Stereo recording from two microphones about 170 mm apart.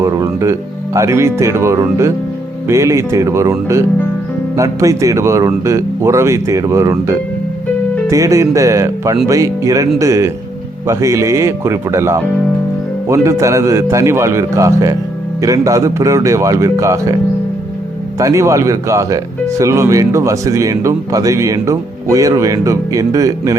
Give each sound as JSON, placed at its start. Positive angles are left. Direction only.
{"t": 0.0, "sound": "music", "side_deg": -20}
{"t": 0.9, "sound": "speech", "side_deg": -15}
{"t": 18.2, "sound": "speech", "side_deg": -20}